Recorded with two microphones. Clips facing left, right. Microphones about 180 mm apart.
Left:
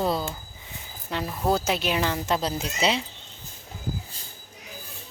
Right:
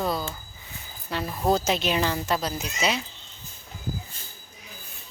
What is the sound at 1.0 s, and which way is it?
Speech, 10° left (ahead or behind).